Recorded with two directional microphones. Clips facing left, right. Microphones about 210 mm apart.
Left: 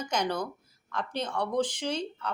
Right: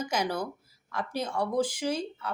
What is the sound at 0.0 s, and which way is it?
Speech, 5° right (ahead or behind).